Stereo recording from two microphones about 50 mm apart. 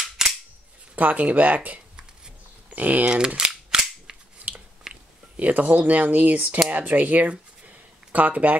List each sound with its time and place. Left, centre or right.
0.2 s cap gun: centre
0.9 s speech: right
3.3 s cap gun: centre
4.4 s chewing: right
5.4 s speech: right